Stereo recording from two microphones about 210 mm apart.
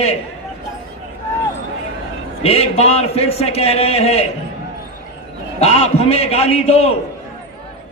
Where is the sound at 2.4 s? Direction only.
30° left (ahead or behind).